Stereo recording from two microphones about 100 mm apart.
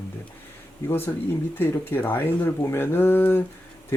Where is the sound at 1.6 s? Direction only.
20° left (ahead or behind).